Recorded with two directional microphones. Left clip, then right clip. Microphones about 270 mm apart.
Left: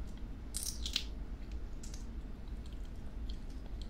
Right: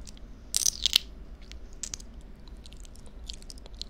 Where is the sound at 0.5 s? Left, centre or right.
Right.